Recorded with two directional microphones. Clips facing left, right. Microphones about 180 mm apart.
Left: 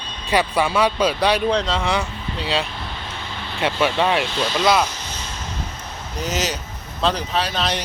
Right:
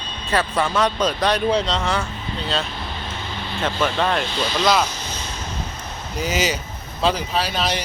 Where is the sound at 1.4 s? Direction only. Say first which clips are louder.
Even; 5° right (ahead or behind).